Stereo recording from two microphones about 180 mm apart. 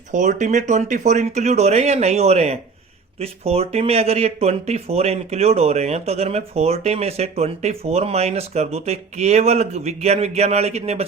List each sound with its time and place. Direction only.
0.1 s speech: 45° right (ahead or behind)